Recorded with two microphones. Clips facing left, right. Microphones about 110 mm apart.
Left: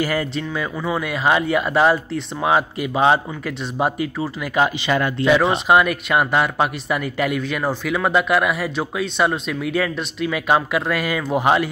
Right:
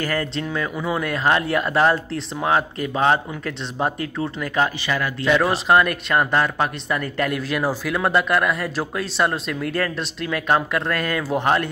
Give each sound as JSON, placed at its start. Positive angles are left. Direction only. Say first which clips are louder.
{"t": 0.0, "sound": "speech", "louder": "left 2 dB", "side_deg": 10}
{"t": 4.8, "sound": "speech", "louder": "left 4 dB", "side_deg": 20}
{"t": 5.7, "sound": "speech", "louder": "left 1 dB", "side_deg": 5}